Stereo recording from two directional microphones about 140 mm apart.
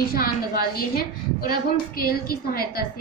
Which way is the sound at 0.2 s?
90° left.